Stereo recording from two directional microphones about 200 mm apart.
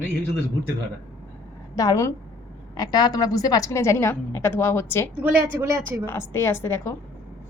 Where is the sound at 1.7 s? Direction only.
15° left (ahead or behind).